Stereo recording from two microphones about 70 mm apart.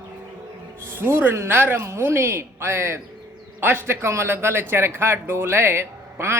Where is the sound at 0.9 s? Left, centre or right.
Right.